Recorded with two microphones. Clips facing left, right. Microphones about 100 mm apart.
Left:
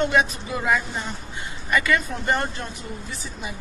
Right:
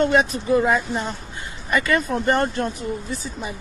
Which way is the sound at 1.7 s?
40° right (ahead or behind).